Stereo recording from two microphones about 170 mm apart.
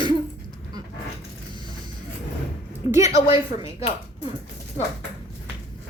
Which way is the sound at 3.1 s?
30° left (ahead or behind).